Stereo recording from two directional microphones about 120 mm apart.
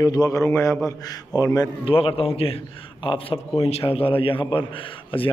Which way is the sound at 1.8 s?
50° left (ahead or behind).